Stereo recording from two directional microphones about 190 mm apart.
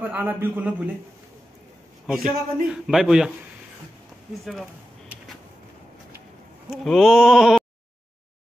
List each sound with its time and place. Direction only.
0.0 s a man's voice: 10° right (ahead or behind)
2.0 s a man's voice: 5° right (ahead or behind)
4.5 s a sound: 5° right (ahead or behind)
6.7 s a man's voice: centre (ahead or behind)